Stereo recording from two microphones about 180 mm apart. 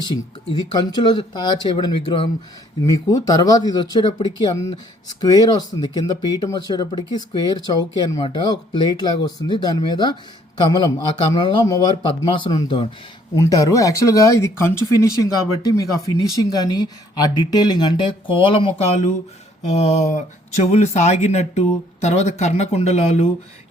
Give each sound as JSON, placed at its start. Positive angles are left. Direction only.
{"t": 0.0, "sound": "speech", "side_deg": 25}
{"t": 19.7, "sound": "speech", "side_deg": 35}